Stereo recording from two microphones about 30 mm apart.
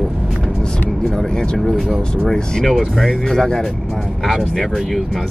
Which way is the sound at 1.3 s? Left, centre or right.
Left.